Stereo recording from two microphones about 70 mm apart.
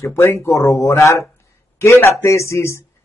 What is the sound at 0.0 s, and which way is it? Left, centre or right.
Speech, left.